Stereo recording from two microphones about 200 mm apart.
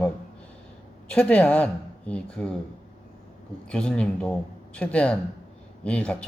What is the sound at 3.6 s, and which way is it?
Speech, 5° left (ahead or behind).